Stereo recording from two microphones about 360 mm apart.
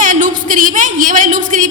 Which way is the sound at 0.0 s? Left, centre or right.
Right.